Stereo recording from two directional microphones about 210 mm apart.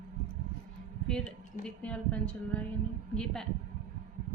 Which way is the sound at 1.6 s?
5° left (ahead or behind).